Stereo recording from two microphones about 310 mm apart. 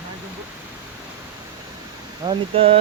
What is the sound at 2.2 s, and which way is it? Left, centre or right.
Speech, centre.